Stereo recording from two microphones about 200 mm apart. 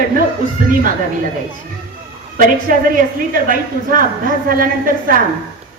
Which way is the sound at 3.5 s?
45° right (ahead or behind).